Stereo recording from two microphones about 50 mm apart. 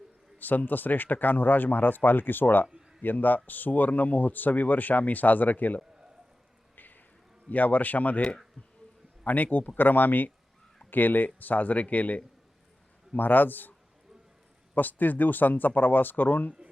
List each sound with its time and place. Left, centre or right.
0.3 s speech: left
6.7 s a sound: left
7.5 s speech: left
9.2 s speech: left
14.8 s speech: left